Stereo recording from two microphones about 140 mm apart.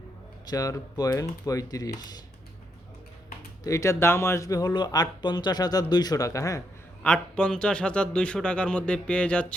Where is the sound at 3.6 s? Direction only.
20° left (ahead or behind).